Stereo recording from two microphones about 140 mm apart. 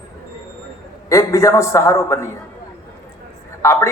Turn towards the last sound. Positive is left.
turn(degrees=20)  # may be behind; listen again after turning